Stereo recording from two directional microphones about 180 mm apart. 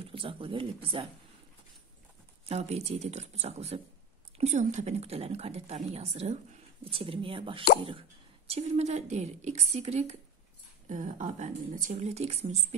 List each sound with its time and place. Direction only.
0.0 s speech: 30° right (ahead or behind)
2.4 s a woman's voice: 35° right (ahead or behind)